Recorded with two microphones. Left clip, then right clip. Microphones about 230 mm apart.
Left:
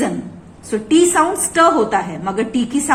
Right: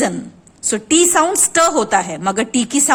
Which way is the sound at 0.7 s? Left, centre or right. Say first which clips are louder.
Left 1 dB; right.